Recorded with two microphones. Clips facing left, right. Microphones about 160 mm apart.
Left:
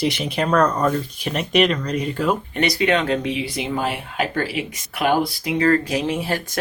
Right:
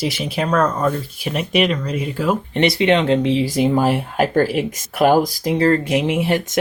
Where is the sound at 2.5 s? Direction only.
25° right (ahead or behind).